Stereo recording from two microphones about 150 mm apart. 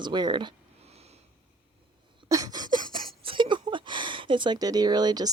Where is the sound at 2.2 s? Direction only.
25° right (ahead or behind).